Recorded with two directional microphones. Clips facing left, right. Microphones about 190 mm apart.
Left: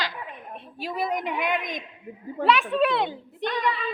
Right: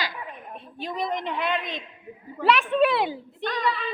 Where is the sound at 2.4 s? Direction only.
Centre (ahead or behind).